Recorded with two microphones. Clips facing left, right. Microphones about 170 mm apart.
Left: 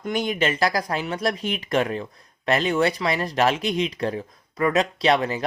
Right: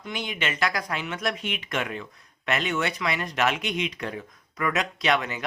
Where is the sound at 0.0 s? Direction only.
45° left (ahead or behind).